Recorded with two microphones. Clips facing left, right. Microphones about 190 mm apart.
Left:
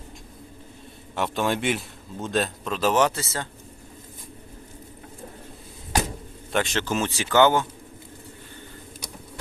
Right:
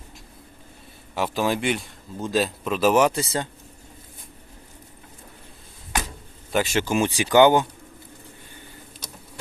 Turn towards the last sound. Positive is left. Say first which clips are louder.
# right 3 dB
turn(degrees=-15)  # may be behind; listen again after turning